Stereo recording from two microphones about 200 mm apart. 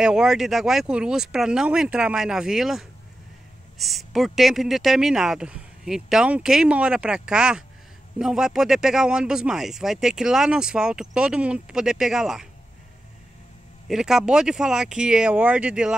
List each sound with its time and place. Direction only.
0.0 s speech: 5° right (ahead or behind)
13.8 s speech: centre (ahead or behind)